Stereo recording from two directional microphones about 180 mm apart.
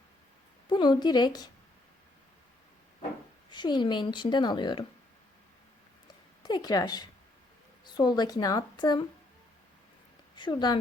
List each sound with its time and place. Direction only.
0.7 s a woman's voice: 25° left (ahead or behind)
3.5 s a woman's voice: 25° left (ahead or behind)
6.4 s a woman's voice: 20° left (ahead or behind)
10.3 s speech: 25° left (ahead or behind)